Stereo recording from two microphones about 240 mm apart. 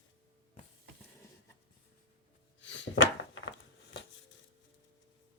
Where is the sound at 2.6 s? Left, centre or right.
Left.